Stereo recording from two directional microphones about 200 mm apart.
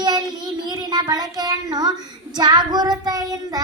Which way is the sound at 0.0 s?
20° right (ahead or behind).